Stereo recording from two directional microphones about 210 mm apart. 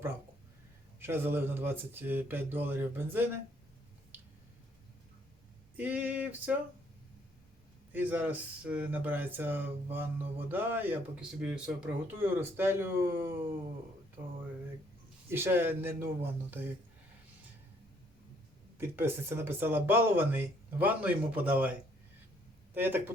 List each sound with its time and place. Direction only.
0.9 s speech: 10° right (ahead or behind)
5.7 s speech: 10° right (ahead or behind)
7.9 s speech: 10° right (ahead or behind)
15.3 s speech: 10° right (ahead or behind)
18.8 s speech: 10° right (ahead or behind)